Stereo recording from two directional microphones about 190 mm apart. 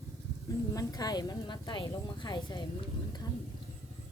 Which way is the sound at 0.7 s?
20° left (ahead or behind).